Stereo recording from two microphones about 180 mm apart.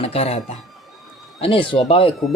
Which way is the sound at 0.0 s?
35° left (ahead or behind).